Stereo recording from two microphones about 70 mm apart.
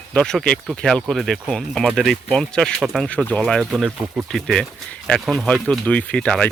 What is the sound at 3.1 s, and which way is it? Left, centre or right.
Speech, centre.